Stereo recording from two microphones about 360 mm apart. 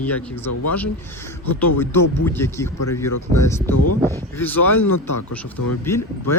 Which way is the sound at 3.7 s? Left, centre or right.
Left.